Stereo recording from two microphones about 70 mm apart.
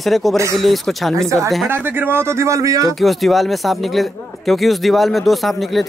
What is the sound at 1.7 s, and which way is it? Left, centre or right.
Speech, right.